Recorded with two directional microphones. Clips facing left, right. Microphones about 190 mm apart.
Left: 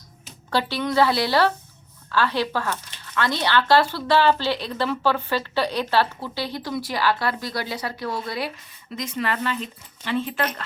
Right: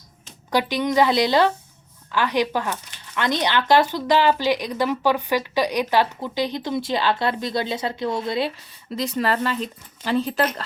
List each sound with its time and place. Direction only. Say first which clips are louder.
0.5 s speech: right 2 dB; 15° right (ahead or behind)
9.0 s speech: right 4 dB; 35° right (ahead or behind)